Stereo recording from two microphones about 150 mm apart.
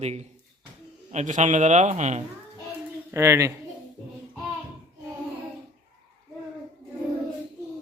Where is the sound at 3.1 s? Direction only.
20° right (ahead or behind).